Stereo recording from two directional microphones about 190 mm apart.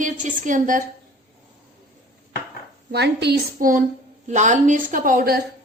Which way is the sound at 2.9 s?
60° right (ahead or behind).